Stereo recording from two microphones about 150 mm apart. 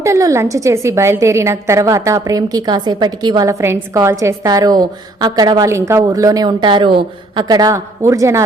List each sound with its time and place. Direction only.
0.0 s a woman's voice: 20° right (ahead or behind)